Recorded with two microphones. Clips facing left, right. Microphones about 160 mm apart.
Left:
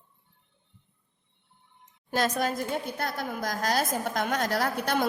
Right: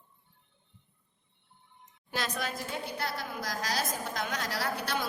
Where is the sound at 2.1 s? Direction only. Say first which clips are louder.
Left 8 dB; 45° left (ahead or behind).